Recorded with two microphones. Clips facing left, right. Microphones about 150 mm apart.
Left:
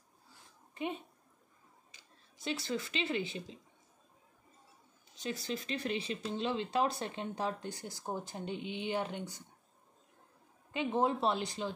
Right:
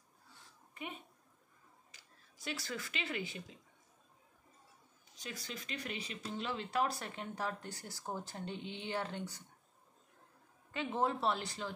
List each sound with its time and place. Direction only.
1.9 s speech: 25° left (ahead or behind)
5.1 s speech: 25° left (ahead or behind)
10.7 s speech: 20° left (ahead or behind)